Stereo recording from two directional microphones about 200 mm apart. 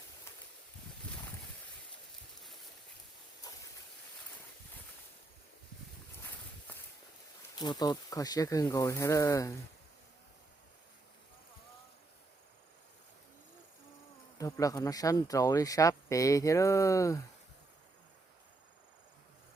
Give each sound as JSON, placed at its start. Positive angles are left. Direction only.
{"t": 3.5, "sound": "a sound", "side_deg": 20}
{"t": 6.7, "sound": "walk", "side_deg": 10}
{"t": 7.6, "sound": "speech", "side_deg": 20}
{"t": 14.3, "sound": "speech", "side_deg": 15}